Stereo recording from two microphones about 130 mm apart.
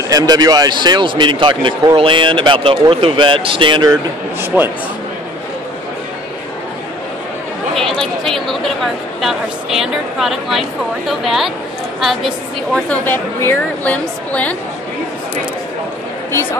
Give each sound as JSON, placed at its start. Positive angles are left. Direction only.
{"t": 0.1, "sound": "speech", "side_deg": -30}
{"t": 3.9, "sound": "speech", "side_deg": -15}
{"t": 8.0, "sound": "speech", "side_deg": 5}
{"t": 12.9, "sound": "a woman's voice", "side_deg": 15}
{"t": 16.3, "sound": "speech", "side_deg": 20}